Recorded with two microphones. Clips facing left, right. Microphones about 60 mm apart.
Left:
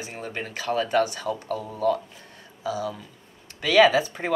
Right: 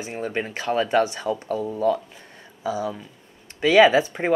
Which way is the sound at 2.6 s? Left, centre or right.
Right.